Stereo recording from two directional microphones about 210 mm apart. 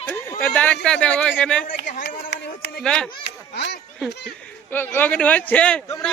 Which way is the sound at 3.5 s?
55° left (ahead or behind).